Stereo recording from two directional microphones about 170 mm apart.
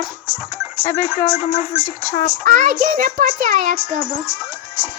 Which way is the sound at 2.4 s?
55° right (ahead or behind).